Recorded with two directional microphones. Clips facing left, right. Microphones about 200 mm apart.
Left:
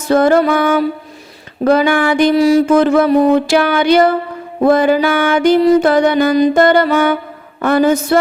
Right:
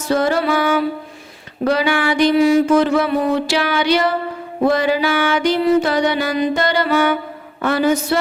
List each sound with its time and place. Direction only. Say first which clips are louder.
0.1 s music: left 6 dB; 55° left (ahead or behind)